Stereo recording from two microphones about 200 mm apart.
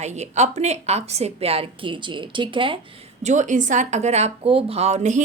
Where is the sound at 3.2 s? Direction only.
35° right (ahead or behind).